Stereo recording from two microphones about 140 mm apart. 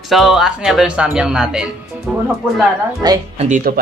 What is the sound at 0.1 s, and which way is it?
Speech, centre (ahead or behind).